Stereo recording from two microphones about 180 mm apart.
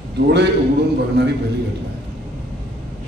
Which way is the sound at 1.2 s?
65° right (ahead or behind).